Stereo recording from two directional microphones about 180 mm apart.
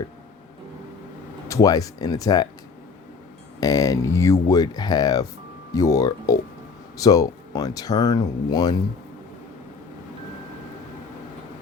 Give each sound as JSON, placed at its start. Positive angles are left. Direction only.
{"t": 1.6, "sound": "speech", "side_deg": 20}
{"t": 3.6, "sound": "speech", "side_deg": 20}